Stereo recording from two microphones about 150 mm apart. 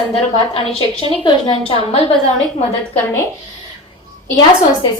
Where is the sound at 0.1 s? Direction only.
40° left (ahead or behind).